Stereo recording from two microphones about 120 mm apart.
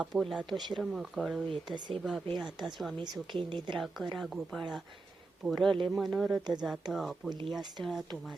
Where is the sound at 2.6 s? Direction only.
Centre (ahead or behind).